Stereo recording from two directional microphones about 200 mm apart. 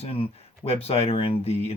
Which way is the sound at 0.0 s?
30° left (ahead or behind).